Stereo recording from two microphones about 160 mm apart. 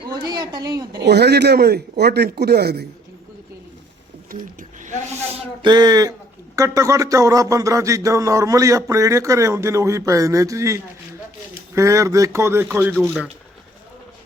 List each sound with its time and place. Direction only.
0.3 s speech: 25° right (ahead or behind)
0.9 s speech: 90° right
4.3 s a sound: 55° right (ahead or behind)
5.3 s a man's voice: 25° right (ahead or behind); by 13.3 s 5° right (ahead or behind)